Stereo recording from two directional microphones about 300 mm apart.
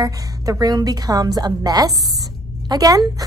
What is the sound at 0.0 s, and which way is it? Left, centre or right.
A woman's voice, centre.